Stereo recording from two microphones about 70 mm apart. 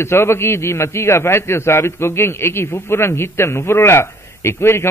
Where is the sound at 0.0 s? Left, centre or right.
Left.